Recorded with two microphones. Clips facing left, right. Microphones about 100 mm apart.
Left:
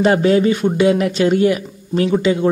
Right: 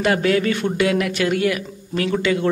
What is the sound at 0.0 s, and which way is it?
Speech, 25° left (ahead or behind).